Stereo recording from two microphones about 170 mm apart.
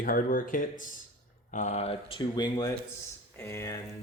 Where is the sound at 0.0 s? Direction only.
55° left (ahead or behind); by 3.8 s 15° left (ahead or behind).